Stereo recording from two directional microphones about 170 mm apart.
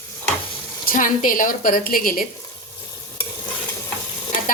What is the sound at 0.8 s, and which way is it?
Speech, 50° left (ahead or behind).